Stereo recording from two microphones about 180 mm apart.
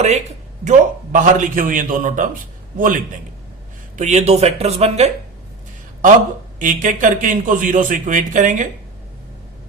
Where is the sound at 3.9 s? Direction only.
40° right (ahead or behind).